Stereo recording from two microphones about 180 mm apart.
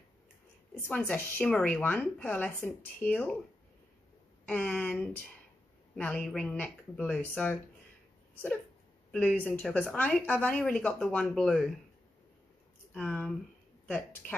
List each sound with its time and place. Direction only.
0.8 s a woman's voice: 10° left (ahead or behind)
4.5 s a woman's voice: 5° left (ahead or behind)
9.1 s a woman's voice: 5° left (ahead or behind)
12.9 s a woman's voice: 5° left (ahead or behind)